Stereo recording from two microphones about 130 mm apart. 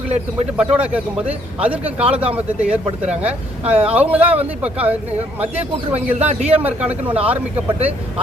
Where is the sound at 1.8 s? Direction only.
50° right (ahead or behind).